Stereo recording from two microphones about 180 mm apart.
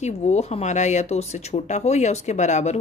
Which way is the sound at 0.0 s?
40° left (ahead or behind).